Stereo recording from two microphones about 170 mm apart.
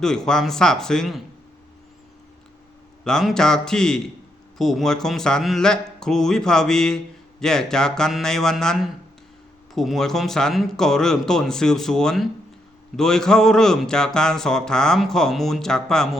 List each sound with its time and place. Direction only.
0.0 s speech: 5° left (ahead or behind)
3.0 s speech: 5° left (ahead or behind)